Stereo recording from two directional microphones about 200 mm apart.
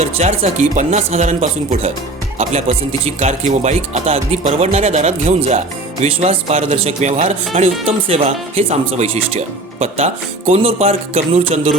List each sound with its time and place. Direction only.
0.0 s speech: 35° right (ahead or behind)